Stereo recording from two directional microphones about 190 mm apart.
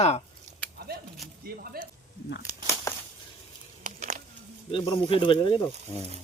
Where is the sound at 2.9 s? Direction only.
15° left (ahead or behind).